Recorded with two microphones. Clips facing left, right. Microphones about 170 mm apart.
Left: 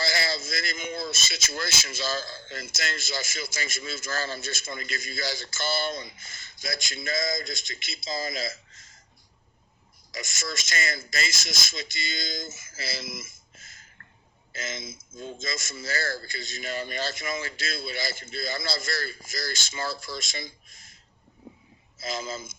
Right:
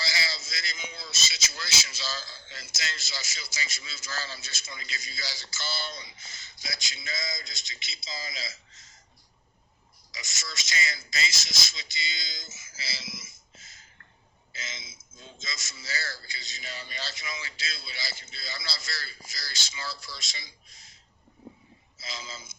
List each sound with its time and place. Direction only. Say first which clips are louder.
0.0 s speech: left 7 dB; 50° left (ahead or behind)
10.1 s speech: left 8 dB; 50° left (ahead or behind)
21.9 s speech: left 9 dB; 50° left (ahead or behind)